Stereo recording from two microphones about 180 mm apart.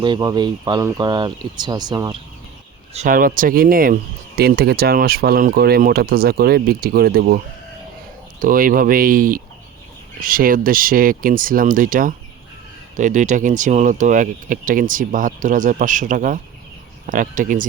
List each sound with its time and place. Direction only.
0.0 s speech: 25° right (ahead or behind)
2.9 s speech: 45° right (ahead or behind)